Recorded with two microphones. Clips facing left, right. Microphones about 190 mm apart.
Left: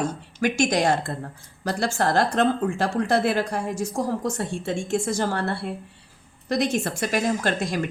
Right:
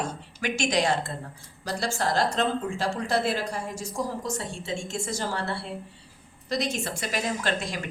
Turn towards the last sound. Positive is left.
turn(degrees=45)  # may be behind; listen again after turning